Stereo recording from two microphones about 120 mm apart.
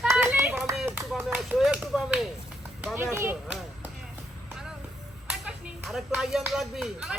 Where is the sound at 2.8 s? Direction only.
20° right (ahead or behind).